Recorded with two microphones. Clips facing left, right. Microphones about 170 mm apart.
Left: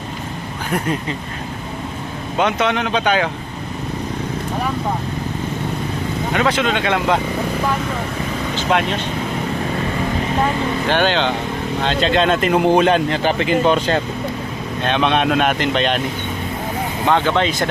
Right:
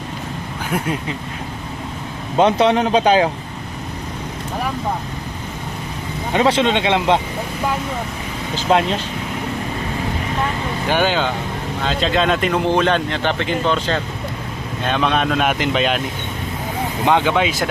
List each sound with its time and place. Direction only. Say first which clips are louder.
2.4 s speech: right 4 dB; 30° right (ahead or behind)
6.3 s speech: right 3 dB; 30° right (ahead or behind)
8.7 s speech: right 3 dB; 30° right (ahead or behind)
10.8 s speech: even; 10° right (ahead or behind); by 13.7 s 10° left (ahead or behind)
14.8 s speech: left 2 dB; centre (ahead or behind)
17.1 s speech: even; 15° right (ahead or behind)